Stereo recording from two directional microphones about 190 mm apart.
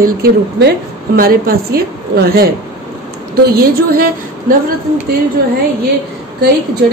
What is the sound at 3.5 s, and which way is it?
Speech, 50° right (ahead or behind).